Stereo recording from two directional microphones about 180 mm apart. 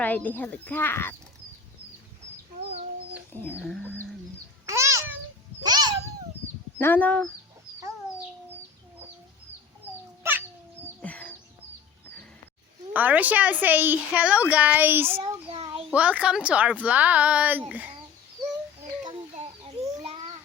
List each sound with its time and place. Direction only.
0.0 s speech: 10° left (ahead or behind)
2.6 s chicken: 35° right (ahead or behind)
3.3 s speech: 10° left (ahead or behind)
4.6 s a sound: 15° right (ahead or behind)
5.6 s cat: 20° right (ahead or behind)
6.7 s speech: 10° left (ahead or behind)
11.0 s music: 10° left (ahead or behind)
12.9 s a woman's voice: 10° right (ahead or behind)
15.4 s a sound: 30° right (ahead or behind)
15.9 s a woman's voice: 5° right (ahead or behind)